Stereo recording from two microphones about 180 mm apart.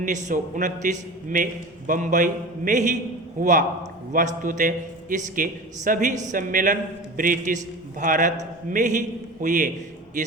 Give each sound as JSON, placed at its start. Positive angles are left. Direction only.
{"t": 0.0, "sound": "a man's voice", "side_deg": -45}